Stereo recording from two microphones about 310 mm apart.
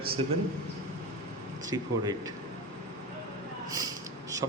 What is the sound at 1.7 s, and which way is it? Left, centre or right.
Speech, centre.